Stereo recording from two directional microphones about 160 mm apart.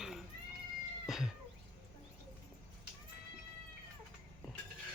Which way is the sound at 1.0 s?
Centre (ahead or behind).